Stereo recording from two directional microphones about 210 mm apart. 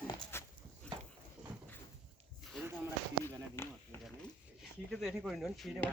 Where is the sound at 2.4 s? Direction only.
Centre (ahead or behind).